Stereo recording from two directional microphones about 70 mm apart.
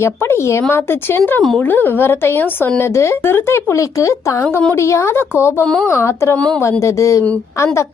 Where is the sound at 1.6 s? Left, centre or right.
Left.